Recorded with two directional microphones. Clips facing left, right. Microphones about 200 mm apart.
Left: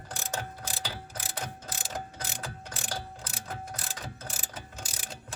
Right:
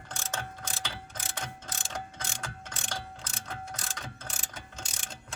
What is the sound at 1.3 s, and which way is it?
Mechanisms, 5° left (ahead or behind).